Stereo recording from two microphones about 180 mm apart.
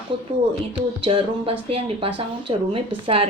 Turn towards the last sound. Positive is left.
turn(degrees=-30)  # may be behind; listen again after turning